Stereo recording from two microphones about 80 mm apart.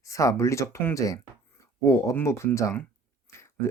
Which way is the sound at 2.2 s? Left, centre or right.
Left.